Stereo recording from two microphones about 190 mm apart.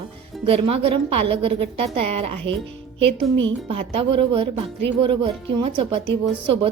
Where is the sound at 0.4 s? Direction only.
30° right (ahead or behind).